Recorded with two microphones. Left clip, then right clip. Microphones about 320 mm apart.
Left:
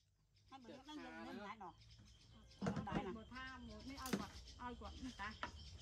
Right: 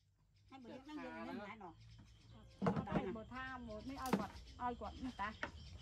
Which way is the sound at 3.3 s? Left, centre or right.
Centre.